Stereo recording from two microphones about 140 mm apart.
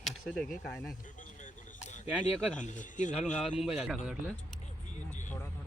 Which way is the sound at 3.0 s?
60° left (ahead or behind).